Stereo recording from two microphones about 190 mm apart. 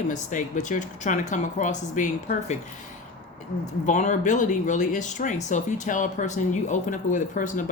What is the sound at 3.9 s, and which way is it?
Speech, 40° left (ahead or behind).